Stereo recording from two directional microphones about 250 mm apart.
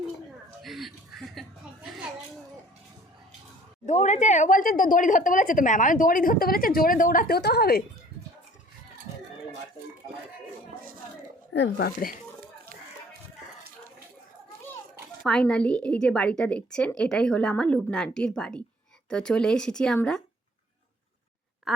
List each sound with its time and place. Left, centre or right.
0.6 s chuckle: centre
3.8 s a woman's voice: left
11.5 s a woman's voice: left
15.2 s a woman's voice: centre